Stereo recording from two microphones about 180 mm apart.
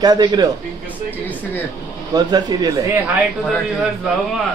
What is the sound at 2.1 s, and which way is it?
Speech, 20° right (ahead or behind).